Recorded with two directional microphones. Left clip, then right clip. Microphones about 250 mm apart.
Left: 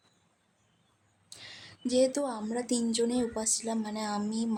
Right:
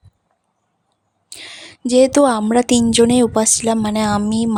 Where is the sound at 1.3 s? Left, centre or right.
Right.